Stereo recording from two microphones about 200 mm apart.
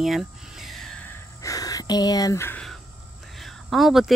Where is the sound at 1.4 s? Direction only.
15° left (ahead or behind).